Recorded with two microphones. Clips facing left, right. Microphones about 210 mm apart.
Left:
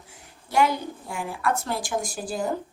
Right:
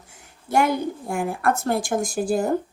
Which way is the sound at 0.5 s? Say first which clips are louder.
Right 2 dB; 50° right (ahead or behind).